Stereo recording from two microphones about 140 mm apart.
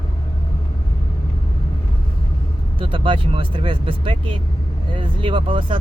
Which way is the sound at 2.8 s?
40° right (ahead or behind).